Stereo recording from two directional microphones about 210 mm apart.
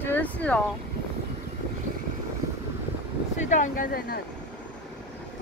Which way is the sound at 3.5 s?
40° left (ahead or behind).